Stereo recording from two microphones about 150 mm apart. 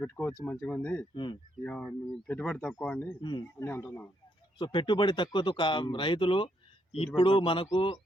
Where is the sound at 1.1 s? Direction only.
30° left (ahead or behind).